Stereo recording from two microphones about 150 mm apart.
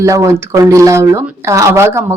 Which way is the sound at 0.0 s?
20° right (ahead or behind).